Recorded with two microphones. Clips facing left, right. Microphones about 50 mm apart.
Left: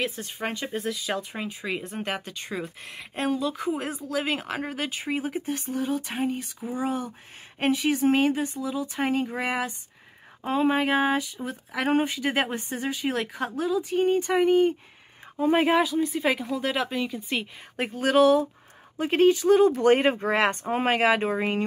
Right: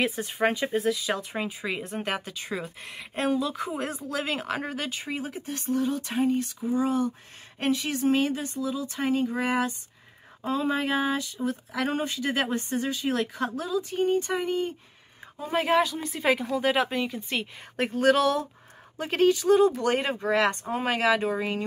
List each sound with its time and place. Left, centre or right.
0.0 s speech: centre; by 15.7 s left
15.7 s speech: centre; by 21.6 s left